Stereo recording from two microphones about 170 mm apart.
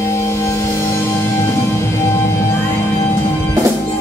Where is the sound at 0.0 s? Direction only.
15° left (ahead or behind).